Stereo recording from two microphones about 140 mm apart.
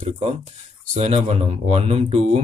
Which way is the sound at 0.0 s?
45° right (ahead or behind).